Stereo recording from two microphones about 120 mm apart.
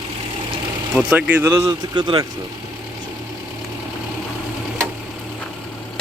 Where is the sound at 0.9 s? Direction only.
10° right (ahead or behind); by 2.0 s 30° right (ahead or behind).